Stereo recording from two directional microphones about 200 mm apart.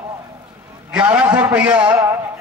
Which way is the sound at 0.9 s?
5° right (ahead or behind).